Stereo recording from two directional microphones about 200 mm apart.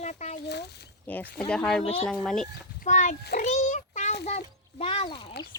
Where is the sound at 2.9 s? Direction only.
40° left (ahead or behind).